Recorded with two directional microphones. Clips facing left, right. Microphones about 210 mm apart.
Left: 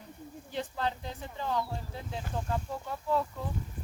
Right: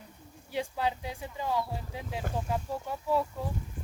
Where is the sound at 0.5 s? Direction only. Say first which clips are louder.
Right 3 dB; 10° right (ahead or behind).